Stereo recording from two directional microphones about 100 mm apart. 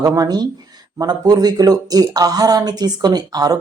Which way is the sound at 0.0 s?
35° right (ahead or behind).